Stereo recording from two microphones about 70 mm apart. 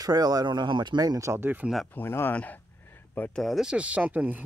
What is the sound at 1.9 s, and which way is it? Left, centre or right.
Speech, left.